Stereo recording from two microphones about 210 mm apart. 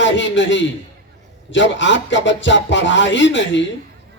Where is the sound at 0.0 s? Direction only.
60° left (ahead or behind).